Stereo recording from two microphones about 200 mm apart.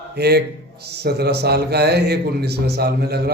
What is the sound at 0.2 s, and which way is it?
A man's voice, 55° right (ahead or behind).